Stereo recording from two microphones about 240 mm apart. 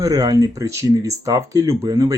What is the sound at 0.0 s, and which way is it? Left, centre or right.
Speech, centre.